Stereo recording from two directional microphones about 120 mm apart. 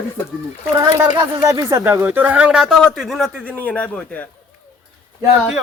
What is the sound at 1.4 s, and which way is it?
A man's voice, 25° right (ahead or behind).